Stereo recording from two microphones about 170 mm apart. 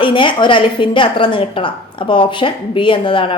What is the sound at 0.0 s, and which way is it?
A woman's voice, 30° left (ahead or behind).